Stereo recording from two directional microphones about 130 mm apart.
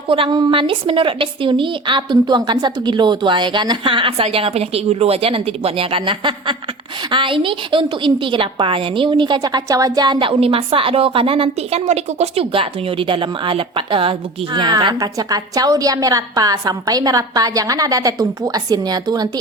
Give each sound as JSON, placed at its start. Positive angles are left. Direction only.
{"t": 0.1, "sound": "a woman's voice", "side_deg": -40}